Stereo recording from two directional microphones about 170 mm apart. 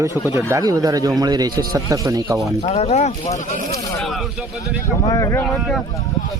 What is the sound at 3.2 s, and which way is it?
Speech, 20° left (ahead or behind).